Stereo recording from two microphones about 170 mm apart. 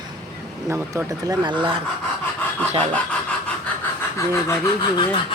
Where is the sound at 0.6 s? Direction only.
15° right (ahead or behind).